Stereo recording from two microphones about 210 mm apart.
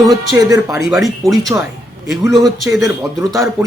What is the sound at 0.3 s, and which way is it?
Speech, 15° right (ahead or behind).